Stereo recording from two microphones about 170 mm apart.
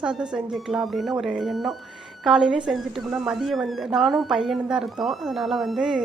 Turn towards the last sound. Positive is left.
turn(degrees=-5)  # may be behind; listen again after turning